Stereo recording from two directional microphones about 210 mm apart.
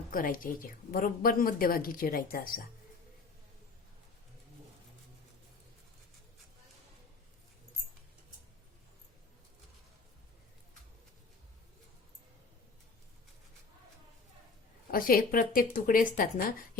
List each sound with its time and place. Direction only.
0.1 s speech: 40° left (ahead or behind)
14.8 s speech: 45° left (ahead or behind)